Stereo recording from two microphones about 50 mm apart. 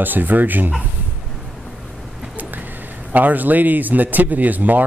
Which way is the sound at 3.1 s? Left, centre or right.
Right.